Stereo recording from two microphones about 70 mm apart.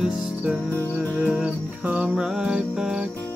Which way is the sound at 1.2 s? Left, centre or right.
Centre.